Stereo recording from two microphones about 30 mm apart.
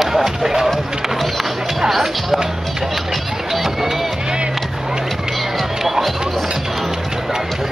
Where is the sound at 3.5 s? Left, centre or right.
Centre.